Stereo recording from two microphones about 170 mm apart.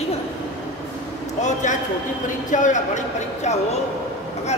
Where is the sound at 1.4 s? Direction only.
45° left (ahead or behind).